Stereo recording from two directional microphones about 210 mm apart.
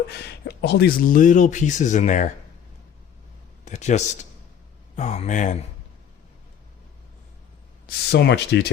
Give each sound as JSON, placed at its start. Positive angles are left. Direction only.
{"t": 0.1, "sound": "speech", "side_deg": 50}
{"t": 3.7, "sound": "speech", "side_deg": 35}
{"t": 7.9, "sound": "speech", "side_deg": 50}